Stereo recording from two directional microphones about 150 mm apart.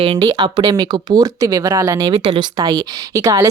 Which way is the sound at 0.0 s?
30° right (ahead or behind).